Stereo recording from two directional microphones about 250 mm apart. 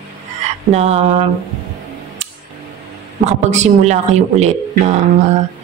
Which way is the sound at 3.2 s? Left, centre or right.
Right.